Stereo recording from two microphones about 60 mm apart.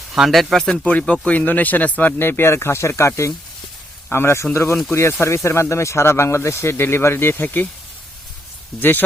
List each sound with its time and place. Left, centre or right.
0.1 s speech: centre
0.9 s speech: left
8.8 s speech: left